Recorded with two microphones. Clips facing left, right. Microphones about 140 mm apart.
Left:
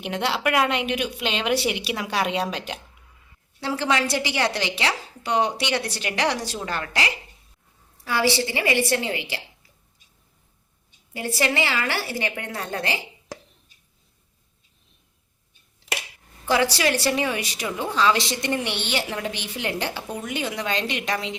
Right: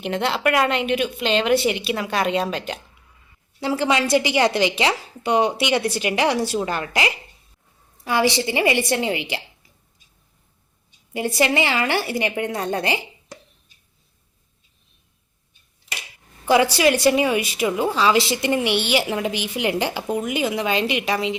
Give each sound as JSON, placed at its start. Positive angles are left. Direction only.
{"t": 0.0, "sound": "a woman's voice", "side_deg": 5}
{"t": 3.6, "sound": "a woman's voice", "side_deg": -15}
{"t": 11.1, "sound": "a woman's voice", "side_deg": -20}
{"t": 16.7, "sound": "a woman's voice", "side_deg": -15}